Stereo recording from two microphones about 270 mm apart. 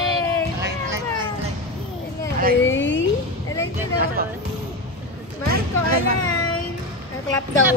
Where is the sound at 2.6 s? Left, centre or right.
Left.